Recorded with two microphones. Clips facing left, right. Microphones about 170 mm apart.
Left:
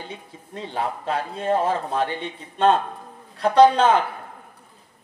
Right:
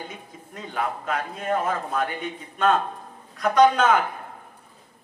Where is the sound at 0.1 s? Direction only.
30° left (ahead or behind).